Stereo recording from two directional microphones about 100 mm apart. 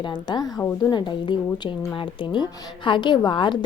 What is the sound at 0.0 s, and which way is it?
A woman's voice, 50° left (ahead or behind).